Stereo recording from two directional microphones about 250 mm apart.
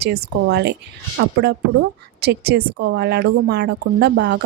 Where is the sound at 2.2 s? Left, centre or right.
Right.